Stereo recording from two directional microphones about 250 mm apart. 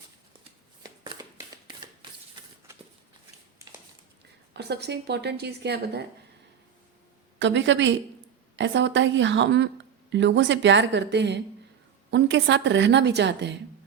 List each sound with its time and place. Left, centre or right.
0.8 s shuffling cards: centre
4.5 s speech: right
7.3 s speech: right